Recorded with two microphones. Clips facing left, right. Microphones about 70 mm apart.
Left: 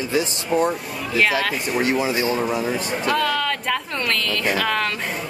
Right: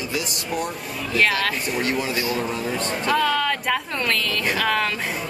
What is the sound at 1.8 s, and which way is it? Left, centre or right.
Speech, centre.